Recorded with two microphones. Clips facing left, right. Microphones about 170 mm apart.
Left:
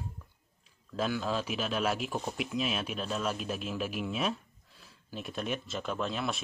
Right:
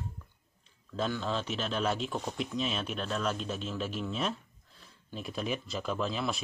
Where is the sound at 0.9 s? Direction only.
10° left (ahead or behind).